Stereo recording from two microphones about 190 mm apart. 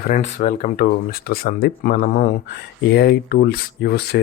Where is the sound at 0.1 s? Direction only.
45° left (ahead or behind).